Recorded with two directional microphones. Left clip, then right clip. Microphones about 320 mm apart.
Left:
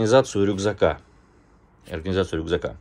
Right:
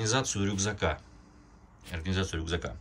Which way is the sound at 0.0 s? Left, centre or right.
Centre.